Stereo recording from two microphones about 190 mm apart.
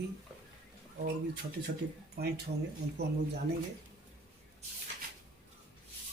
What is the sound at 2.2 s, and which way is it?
Speech, 50° right (ahead or behind).